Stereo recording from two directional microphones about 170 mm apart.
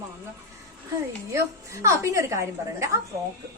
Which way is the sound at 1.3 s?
15° right (ahead or behind).